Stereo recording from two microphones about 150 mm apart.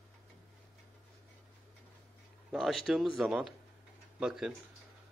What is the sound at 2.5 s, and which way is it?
A man's voice, centre (ahead or behind).